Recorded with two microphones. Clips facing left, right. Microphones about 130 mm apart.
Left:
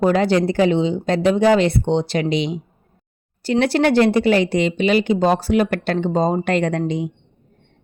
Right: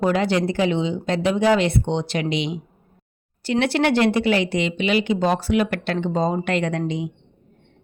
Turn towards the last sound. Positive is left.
turn(degrees=40)  # may be behind; listen again after turning